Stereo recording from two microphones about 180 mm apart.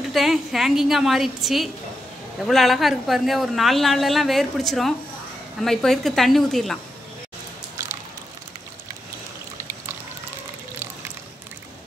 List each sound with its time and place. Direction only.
0.1 s speech: centre (ahead or behind)